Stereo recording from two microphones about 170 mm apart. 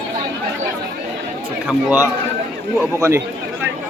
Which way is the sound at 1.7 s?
5° right (ahead or behind).